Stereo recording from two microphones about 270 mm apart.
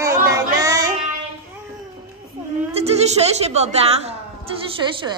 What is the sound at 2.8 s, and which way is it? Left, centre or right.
Speech, right.